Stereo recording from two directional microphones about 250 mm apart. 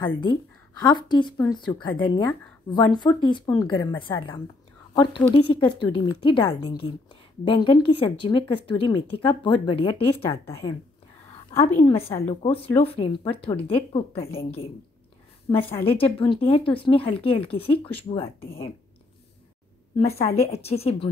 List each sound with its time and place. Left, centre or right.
0.0 s a woman's voice: centre
10.3 s a woman's voice: centre
12.3 s speech: left
15.5 s speech: left
20.0 s speech: left